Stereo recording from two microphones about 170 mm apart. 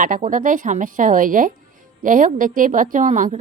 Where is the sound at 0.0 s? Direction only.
50° right (ahead or behind).